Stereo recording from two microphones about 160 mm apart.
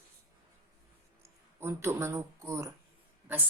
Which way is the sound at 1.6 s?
15° right (ahead or behind).